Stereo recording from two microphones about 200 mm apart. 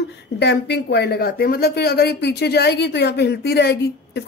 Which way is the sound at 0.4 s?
60° left (ahead or behind).